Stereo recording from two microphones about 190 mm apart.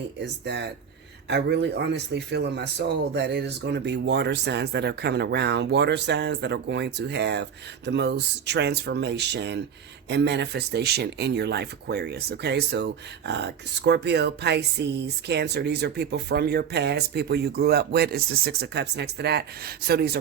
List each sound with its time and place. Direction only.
0.2 s speech: 65° right (ahead or behind)